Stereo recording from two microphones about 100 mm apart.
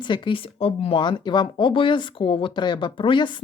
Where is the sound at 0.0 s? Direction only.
50° left (ahead or behind); by 0.9 s 75° left (ahead or behind).